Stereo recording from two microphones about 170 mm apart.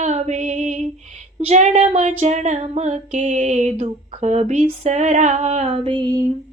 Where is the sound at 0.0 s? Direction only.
45° right (ahead or behind).